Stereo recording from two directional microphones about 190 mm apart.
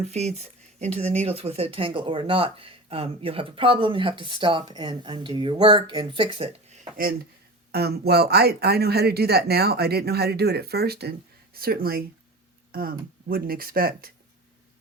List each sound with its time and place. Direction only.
0.0 s speech: 35° right (ahead or behind)
7.7 s speech: 55° right (ahead or behind)